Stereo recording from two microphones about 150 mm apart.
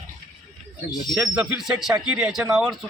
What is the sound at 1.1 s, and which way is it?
Speech, 5° right (ahead or behind).